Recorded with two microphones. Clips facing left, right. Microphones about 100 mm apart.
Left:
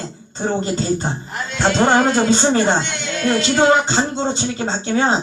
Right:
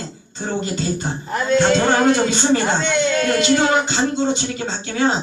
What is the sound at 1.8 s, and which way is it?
A man's voice, 35° left (ahead or behind).